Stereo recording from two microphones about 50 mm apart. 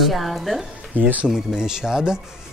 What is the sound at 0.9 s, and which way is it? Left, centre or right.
Speech, right.